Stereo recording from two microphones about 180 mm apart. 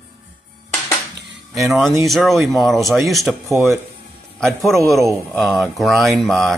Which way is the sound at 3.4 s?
15° right (ahead or behind).